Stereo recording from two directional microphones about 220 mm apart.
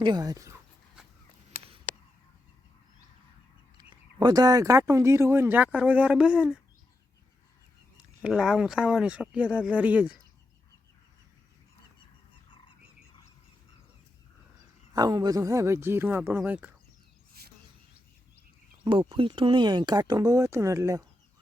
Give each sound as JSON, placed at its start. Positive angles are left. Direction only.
{"t": 0.0, "sound": "speech", "side_deg": -20}
{"t": 1.6, "sound": "a sound", "side_deg": -25}
{"t": 3.8, "sound": "speech", "side_deg": -20}
{"t": 8.2, "sound": "speech", "side_deg": 0}
{"t": 14.9, "sound": "speech", "side_deg": -20}
{"t": 17.4, "sound": "a sound", "side_deg": -45}
{"t": 18.9, "sound": "speech", "side_deg": -25}